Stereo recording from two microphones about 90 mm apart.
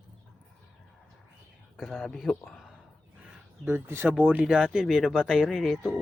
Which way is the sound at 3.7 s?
25° right (ahead or behind).